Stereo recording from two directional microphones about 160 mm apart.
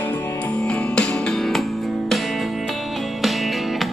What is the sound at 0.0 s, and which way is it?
Music, 15° left (ahead or behind).